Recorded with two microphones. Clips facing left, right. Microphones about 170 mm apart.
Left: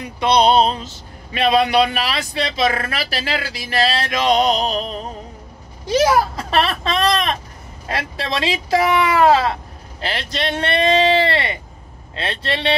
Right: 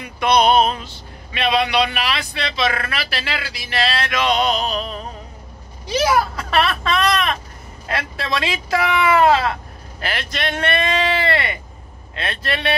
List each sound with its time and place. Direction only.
0.2 s speech: 30° left (ahead or behind)
6.0 s speech: 35° left (ahead or behind)